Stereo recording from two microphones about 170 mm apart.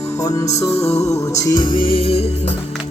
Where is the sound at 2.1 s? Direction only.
75° left (ahead or behind).